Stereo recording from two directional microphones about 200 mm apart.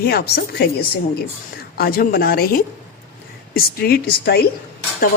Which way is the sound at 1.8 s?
45° left (ahead or behind).